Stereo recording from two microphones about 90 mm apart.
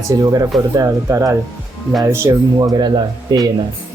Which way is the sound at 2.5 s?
50° right (ahead or behind).